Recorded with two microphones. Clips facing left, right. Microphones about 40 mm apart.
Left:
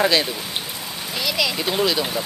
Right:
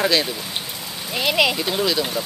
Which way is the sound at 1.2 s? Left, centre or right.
Right.